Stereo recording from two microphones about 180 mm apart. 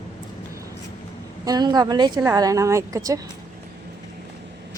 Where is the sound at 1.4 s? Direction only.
20° right (ahead or behind).